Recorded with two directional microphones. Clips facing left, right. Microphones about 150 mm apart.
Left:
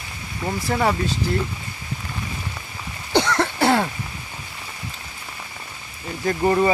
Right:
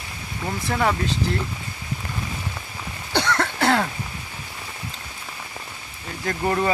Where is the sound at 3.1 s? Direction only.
10° left (ahead or behind).